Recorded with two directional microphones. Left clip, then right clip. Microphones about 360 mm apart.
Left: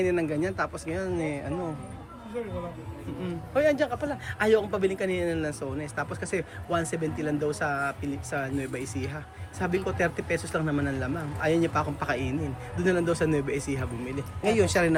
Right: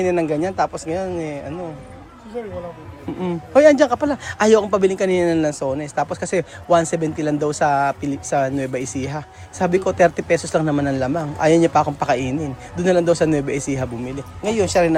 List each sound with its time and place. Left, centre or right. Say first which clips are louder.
0.0 s speech: right 8 dB; centre
3.2 s speech: right 12 dB; centre